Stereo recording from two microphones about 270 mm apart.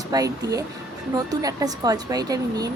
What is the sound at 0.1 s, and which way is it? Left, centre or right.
Speech, centre.